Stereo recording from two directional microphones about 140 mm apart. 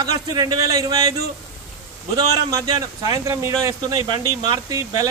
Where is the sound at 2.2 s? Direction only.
25° right (ahead or behind).